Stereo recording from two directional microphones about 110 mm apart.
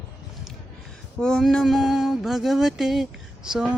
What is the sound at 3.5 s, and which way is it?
Mantra, 10° right (ahead or behind).